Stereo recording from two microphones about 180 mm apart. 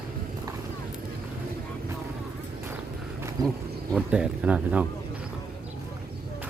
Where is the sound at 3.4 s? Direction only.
20° right (ahead or behind).